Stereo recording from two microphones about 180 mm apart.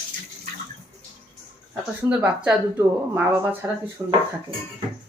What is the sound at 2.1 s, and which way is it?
Speech, 10° right (ahead or behind).